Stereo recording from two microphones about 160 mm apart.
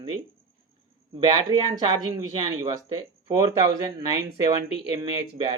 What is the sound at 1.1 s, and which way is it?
Speech, 30° right (ahead or behind).